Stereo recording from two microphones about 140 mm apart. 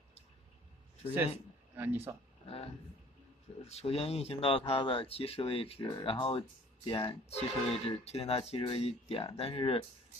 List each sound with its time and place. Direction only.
1.8 s speech: 15° right (ahead or behind)
2.4 s speech: 45° left (ahead or behind)